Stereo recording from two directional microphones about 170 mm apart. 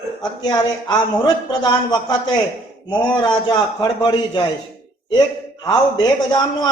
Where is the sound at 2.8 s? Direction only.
25° left (ahead or behind).